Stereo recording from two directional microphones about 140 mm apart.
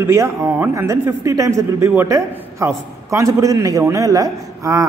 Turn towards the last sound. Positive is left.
turn(degrees=-25)  # may be behind; listen again after turning